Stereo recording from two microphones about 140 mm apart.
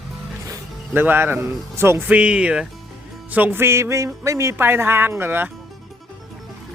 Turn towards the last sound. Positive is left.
turn(degrees=-15)  # may be behind; listen again after turning